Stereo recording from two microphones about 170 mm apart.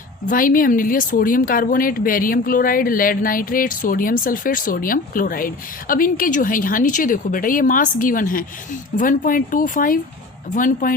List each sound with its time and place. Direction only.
0.3 s speech: 55° left (ahead or behind)